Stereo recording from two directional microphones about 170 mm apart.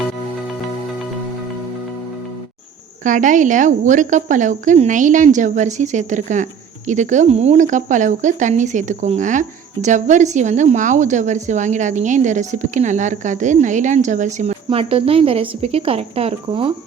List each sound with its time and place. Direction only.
3.0 s a woman's voice: 50° right (ahead or behind); by 16.7 s 30° right (ahead or behind)